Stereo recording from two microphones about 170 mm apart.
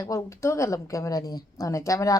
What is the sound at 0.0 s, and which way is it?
A woman's voice, 20° left (ahead or behind).